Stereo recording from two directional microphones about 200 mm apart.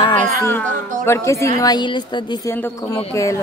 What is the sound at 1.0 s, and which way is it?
A woman's voice, 15° left (ahead or behind).